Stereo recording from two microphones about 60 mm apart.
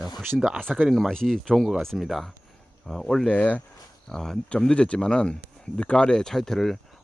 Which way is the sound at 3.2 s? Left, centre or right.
Left.